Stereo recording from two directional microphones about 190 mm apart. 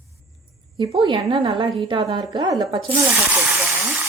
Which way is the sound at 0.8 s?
25° right (ahead or behind).